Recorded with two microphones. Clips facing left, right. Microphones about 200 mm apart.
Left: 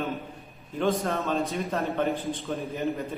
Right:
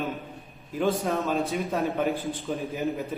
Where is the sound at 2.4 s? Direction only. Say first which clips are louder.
Right 1 dB; centre (ahead or behind).